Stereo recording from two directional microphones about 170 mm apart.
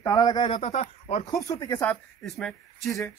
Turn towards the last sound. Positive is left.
turn(degrees=0)  # may be behind; listen again after turning